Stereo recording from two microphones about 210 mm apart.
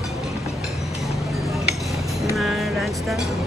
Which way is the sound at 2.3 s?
Centre (ahead or behind).